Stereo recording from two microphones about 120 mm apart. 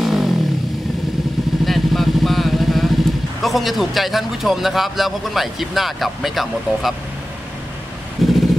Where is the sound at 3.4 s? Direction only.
Centre (ahead or behind).